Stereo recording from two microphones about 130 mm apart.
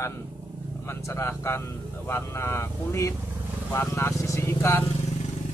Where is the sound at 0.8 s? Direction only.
20° left (ahead or behind).